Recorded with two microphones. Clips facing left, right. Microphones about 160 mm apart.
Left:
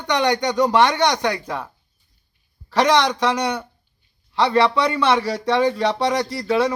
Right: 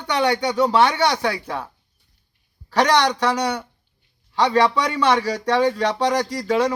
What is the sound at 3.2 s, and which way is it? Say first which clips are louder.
Speech: even; 10° right (ahead or behind).